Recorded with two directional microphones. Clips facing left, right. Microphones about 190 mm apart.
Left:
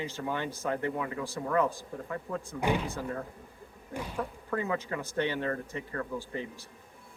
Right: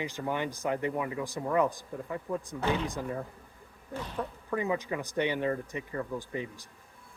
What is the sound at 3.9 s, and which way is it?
Speech, 10° left (ahead or behind).